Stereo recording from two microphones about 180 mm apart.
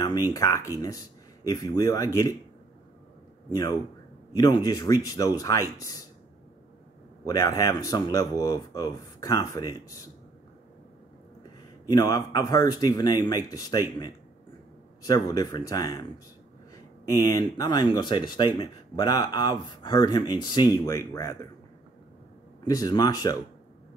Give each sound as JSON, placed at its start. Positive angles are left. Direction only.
{"t": 0.3, "sound": "speech", "side_deg": 15}
{"t": 4.4, "sound": "speech", "side_deg": 20}
{"t": 7.2, "sound": "speech", "side_deg": 20}
{"t": 11.9, "sound": "speech", "side_deg": 20}
{"t": 22.7, "sound": "speech", "side_deg": 20}